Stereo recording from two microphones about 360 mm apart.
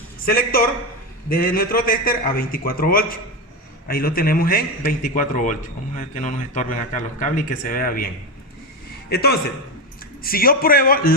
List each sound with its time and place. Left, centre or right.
0.3 s a man's voice: left
9.0 s a man's voice: left